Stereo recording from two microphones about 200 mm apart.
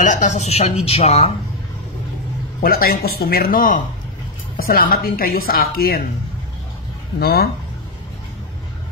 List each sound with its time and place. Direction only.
0.0 s a woman's voice: 40° left (ahead or behind)
2.6 s speech: 50° left (ahead or behind)
7.2 s speech: 50° left (ahead or behind)